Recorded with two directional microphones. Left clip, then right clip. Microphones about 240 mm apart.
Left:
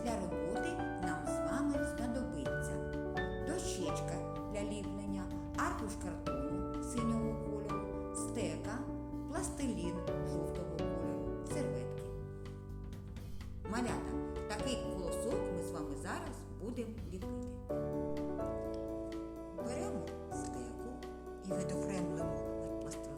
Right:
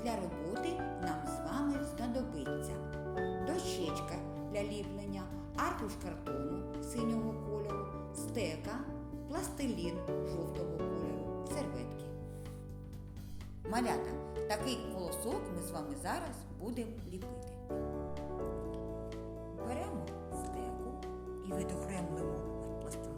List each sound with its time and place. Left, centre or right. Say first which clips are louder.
0.0 s music: left 1 dB; centre
3.4 s music: right 2 dB; centre
8.3 s a woman's voice: right 5 dB; centre
11.4 s music: left 1 dB; centre
13.7 s speech: right 4 dB; centre
21.6 s music: left 4 dB; centre